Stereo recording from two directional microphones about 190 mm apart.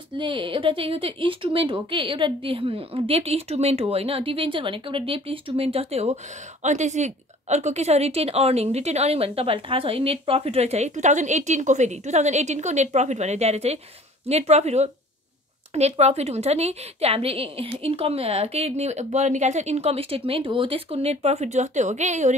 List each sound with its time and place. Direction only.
0.2 s a woman's voice: 25° right (ahead or behind)